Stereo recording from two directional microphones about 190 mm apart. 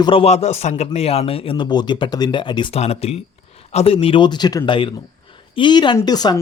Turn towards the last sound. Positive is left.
turn(degrees=20)  # may be behind; listen again after turning